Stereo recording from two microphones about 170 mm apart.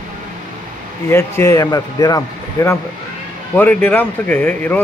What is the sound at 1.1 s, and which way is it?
Speech, 15° left (ahead or behind).